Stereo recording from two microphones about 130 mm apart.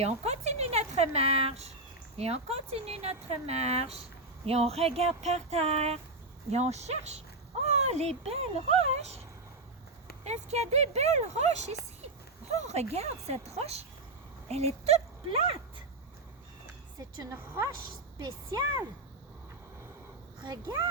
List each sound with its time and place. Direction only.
0.0 s a woman's voice: 55° right (ahead or behind)
10.2 s speech: 55° right (ahead or behind)
17.0 s a woman's voice: 20° right (ahead or behind)
20.4 s speech: 35° right (ahead or behind)